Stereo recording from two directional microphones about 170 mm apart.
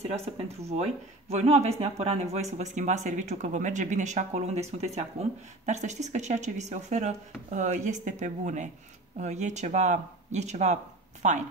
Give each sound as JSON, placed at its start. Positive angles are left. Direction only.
{"t": 0.0, "sound": "speech", "side_deg": -40}